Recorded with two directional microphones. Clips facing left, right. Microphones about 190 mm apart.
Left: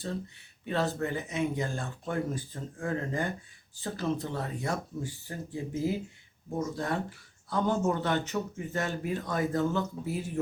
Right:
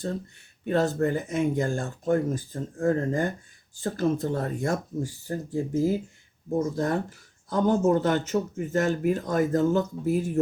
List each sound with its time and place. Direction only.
0.6 s speech: 45° right (ahead or behind)